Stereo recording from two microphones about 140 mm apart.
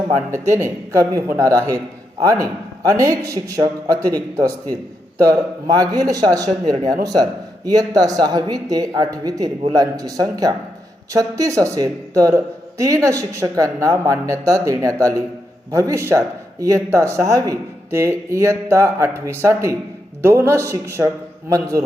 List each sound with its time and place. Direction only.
0.3 s speech: 20° right (ahead or behind)
2.9 s speech: 25° right (ahead or behind)
5.7 s speech: 25° right (ahead or behind)